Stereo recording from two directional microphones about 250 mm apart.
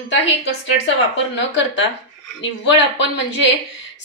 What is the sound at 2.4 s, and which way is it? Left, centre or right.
Speech, left.